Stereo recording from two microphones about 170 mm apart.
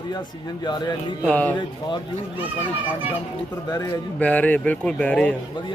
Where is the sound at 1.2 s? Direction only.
5° left (ahead or behind).